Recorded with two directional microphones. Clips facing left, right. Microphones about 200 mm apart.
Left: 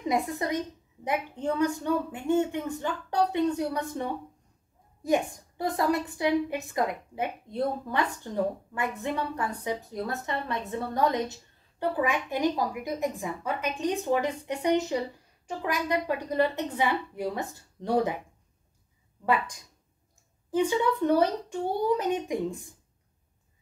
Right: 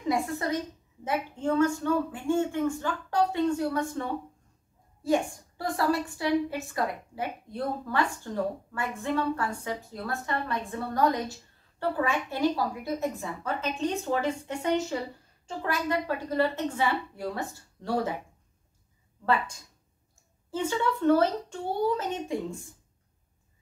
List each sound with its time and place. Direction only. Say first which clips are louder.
0.1 s a woman's voice: right 1 dB; 20° left (ahead or behind)
19.2 s a woman's voice: even; 15° left (ahead or behind)